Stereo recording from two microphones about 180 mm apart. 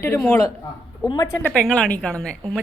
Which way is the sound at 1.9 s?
5° left (ahead or behind).